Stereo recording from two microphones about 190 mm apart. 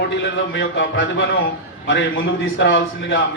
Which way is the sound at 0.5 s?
75° left (ahead or behind).